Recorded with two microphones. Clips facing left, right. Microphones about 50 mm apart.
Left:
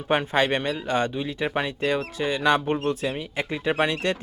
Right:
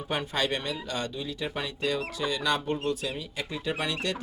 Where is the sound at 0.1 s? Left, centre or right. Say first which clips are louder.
Left 7 dB; left.